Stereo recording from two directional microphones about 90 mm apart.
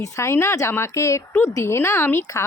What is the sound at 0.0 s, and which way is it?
Speech, 35° left (ahead or behind).